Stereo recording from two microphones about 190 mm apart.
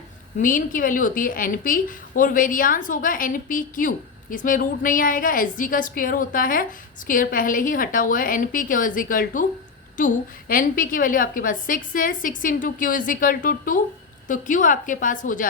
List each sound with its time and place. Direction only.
0.3 s a woman's voice: 45° left (ahead or behind)